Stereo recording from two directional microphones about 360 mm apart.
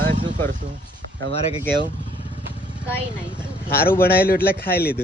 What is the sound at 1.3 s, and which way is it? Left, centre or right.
Speech, centre.